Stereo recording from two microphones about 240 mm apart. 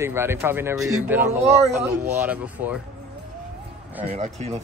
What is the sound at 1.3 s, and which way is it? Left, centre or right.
Speech, right.